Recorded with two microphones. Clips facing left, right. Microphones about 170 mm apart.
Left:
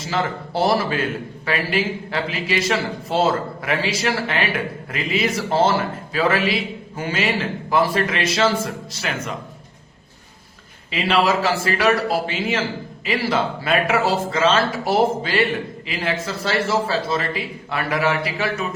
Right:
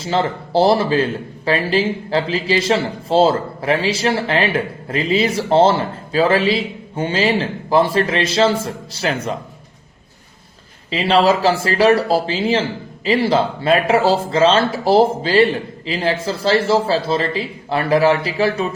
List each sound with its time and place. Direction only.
0.0 s a man's voice: 30° right (ahead or behind)
10.9 s speech: 30° right (ahead or behind)